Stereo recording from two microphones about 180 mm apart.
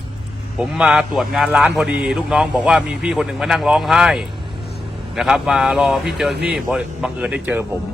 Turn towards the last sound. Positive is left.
turn(degrees=-10)  # may be behind; listen again after turning